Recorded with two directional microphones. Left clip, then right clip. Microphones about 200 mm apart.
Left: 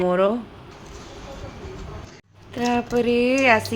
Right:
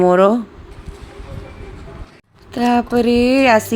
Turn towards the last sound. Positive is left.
turn(degrees=-30)  # may be behind; listen again after turning